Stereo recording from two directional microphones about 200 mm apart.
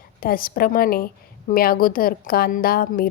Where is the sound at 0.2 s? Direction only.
45° left (ahead or behind).